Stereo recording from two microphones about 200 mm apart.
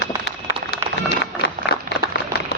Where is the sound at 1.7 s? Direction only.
55° left (ahead or behind).